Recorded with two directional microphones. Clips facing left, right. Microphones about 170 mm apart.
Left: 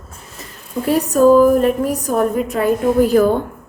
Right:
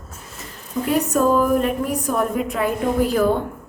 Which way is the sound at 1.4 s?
40° left (ahead or behind).